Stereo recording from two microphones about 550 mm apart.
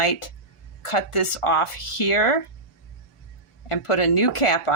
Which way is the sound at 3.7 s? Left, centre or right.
Left.